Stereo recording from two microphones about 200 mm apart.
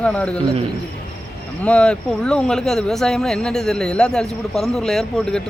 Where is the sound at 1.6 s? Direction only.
5° left (ahead or behind).